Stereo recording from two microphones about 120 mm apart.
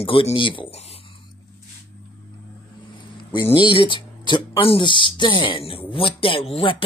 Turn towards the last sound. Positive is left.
turn(degrees=50)  # may be behind; listen again after turning